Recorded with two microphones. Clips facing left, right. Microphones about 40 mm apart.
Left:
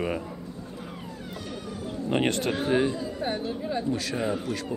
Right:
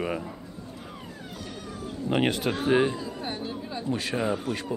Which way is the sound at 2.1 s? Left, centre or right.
Centre.